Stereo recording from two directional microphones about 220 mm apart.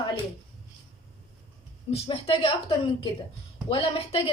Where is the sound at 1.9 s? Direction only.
25° left (ahead or behind).